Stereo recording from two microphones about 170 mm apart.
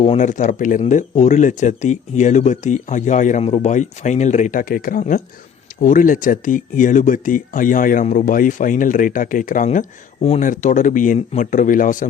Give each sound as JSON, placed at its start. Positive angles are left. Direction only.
{"t": 0.0, "sound": "speech", "side_deg": 40}